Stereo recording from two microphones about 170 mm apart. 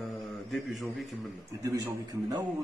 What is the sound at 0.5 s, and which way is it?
Speech, centre (ahead or behind).